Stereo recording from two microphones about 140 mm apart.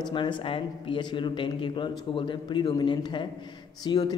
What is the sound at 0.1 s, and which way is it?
Speech, 35° left (ahead or behind).